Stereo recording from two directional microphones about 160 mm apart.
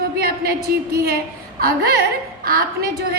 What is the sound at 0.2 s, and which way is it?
Speech, 70° right (ahead or behind).